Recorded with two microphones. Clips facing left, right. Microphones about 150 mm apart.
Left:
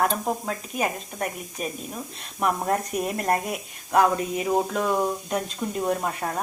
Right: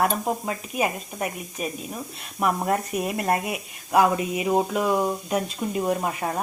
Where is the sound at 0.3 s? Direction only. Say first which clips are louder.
Right 1 dB; 5° right (ahead or behind).